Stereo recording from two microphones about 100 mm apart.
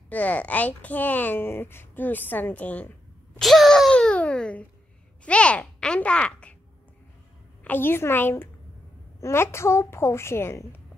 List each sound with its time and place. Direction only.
0.1 s speech: 15° left (ahead or behind)
3.3 s a sound: centre (ahead or behind)
5.2 s speech: 10° left (ahead or behind)
7.6 s a woman's voice: 20° left (ahead or behind)